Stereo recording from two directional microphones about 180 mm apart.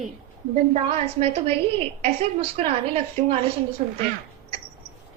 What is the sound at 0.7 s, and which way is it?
A woman's voice, 35° right (ahead or behind).